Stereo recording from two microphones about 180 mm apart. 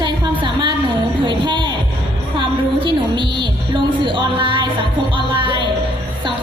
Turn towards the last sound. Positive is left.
turn(degrees=-25)  # may be behind; listen again after turning